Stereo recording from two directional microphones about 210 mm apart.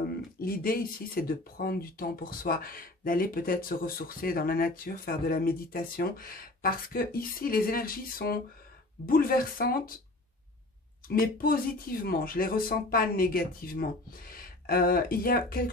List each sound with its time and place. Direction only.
0.4 s speech: 45° left (ahead or behind)
11.1 s speech: 45° left (ahead or behind)